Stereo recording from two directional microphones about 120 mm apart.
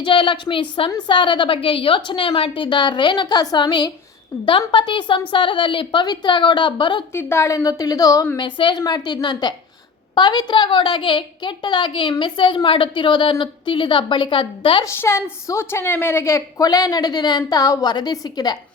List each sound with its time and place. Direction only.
0.0 s a woman's voice: 45° left (ahead or behind)
7.1 s a woman's voice: 20° left (ahead or behind)
8.4 s a woman's voice: 40° left (ahead or behind)
14.8 s a woman's voice: 25° left (ahead or behind)